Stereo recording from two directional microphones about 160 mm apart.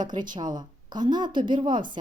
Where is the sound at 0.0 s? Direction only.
25° right (ahead or behind).